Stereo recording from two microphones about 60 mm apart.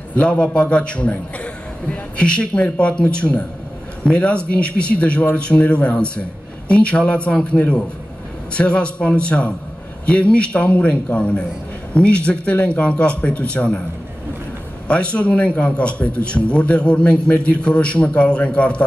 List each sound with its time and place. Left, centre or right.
0.1 s a man's voice: centre
14.9 s a man's voice: centre